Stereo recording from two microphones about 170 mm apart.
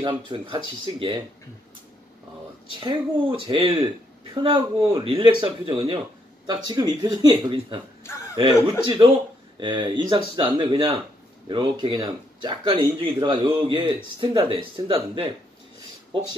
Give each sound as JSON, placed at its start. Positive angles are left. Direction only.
{"t": 0.0, "sound": "speech", "side_deg": -30}
{"t": 2.8, "sound": "a man's voice", "side_deg": -30}
{"t": 8.0, "sound": "a sound", "side_deg": 15}
{"t": 8.8, "sound": "speech", "side_deg": -30}